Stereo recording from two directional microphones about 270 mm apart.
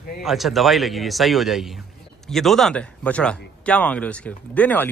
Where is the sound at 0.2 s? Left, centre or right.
Centre.